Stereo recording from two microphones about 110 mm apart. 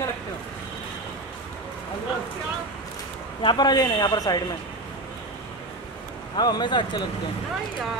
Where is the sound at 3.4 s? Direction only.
40° left (ahead or behind).